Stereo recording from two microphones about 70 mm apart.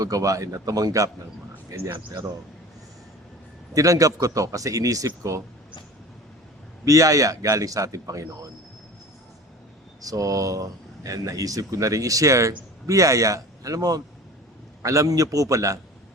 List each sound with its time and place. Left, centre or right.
0.0 s speech: right
3.8 s speech: right
6.8 s a man's voice: right
10.0 s speech: right
14.8 s a man's voice: right